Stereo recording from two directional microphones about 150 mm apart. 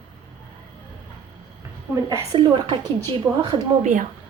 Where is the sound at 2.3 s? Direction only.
30° right (ahead or behind).